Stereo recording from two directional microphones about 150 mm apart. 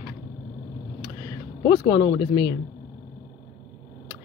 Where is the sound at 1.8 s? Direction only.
30° left (ahead or behind).